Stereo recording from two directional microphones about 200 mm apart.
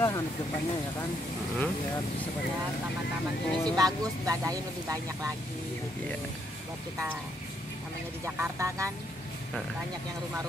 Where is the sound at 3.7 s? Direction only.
20° right (ahead or behind).